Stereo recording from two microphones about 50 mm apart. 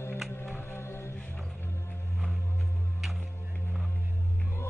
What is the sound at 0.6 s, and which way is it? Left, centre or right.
Music, left.